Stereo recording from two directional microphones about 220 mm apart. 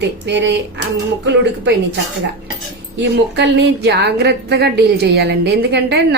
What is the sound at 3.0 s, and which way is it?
A woman's voice, 50° right (ahead or behind).